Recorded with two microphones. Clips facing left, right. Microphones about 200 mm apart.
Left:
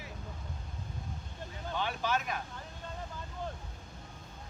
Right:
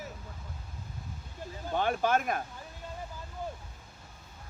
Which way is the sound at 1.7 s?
50° right (ahead or behind).